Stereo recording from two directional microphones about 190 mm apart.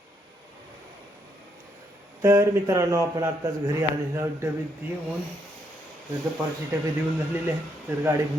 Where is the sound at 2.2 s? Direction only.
15° right (ahead or behind).